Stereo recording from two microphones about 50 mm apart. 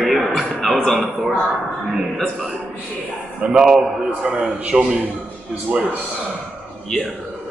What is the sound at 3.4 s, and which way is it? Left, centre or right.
A man's voice, centre.